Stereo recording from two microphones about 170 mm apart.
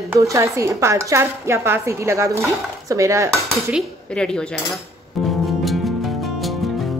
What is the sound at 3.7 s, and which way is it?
Speech, 5° left (ahead or behind).